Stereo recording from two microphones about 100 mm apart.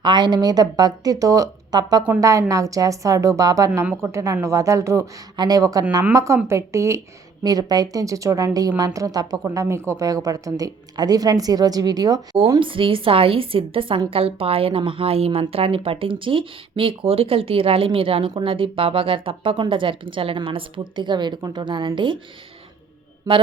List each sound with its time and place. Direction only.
0.0 s a woman's voice: 50° right (ahead or behind); by 7.0 s 30° right (ahead or behind)
7.4 s a woman's voice: 40° right (ahead or behind)
12.5 s a woman's voice: 60° right (ahead or behind)
23.3 s a woman's voice: 35° right (ahead or behind)